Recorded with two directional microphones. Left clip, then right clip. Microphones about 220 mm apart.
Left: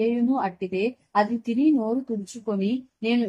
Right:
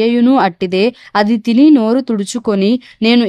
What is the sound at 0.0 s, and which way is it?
A woman's voice, 50° right (ahead or behind).